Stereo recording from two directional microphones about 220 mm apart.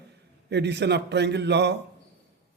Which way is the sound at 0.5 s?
50° right (ahead or behind).